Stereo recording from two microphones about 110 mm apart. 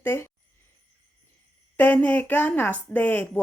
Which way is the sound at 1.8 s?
15° left (ahead or behind).